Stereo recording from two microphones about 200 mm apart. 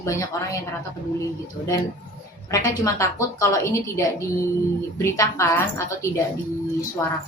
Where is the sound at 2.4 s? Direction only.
15° left (ahead or behind).